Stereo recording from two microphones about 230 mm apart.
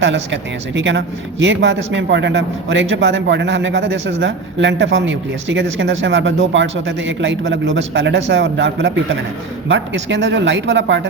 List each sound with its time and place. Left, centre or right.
0.0 s speech: right